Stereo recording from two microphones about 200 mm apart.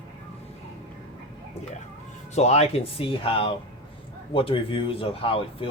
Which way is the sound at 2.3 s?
35° left (ahead or behind).